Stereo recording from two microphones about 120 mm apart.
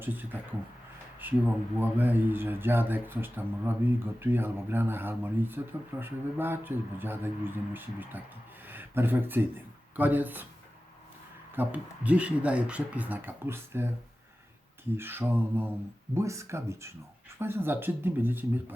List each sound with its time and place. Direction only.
0.0 s speech: 15° right (ahead or behind)
11.5 s speech: 15° right (ahead or behind)
14.9 s speech: 20° right (ahead or behind)